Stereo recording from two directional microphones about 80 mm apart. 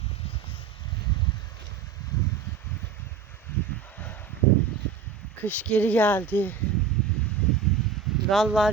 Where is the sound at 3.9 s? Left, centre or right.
Left.